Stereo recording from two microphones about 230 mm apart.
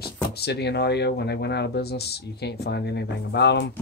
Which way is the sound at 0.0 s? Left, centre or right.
Left.